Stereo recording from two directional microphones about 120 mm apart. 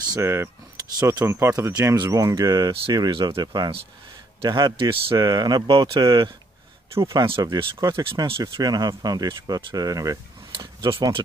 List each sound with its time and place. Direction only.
0.2 s speech: 20° right (ahead or behind)
7.0 s speech: 25° right (ahead or behind)